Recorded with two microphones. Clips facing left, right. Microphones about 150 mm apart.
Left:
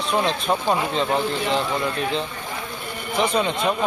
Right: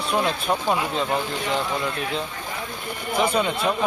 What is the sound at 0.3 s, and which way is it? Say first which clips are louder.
Speech: left 1 dB; 5° right (ahead or behind).